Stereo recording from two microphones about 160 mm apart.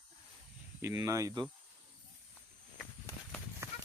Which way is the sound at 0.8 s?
20° right (ahead or behind).